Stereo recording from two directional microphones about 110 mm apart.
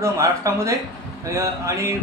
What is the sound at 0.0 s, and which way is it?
A man's voice, 30° right (ahead or behind).